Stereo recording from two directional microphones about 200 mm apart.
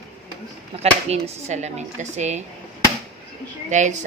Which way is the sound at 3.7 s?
35° right (ahead or behind).